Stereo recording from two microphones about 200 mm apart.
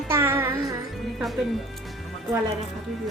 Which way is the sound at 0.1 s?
10° right (ahead or behind).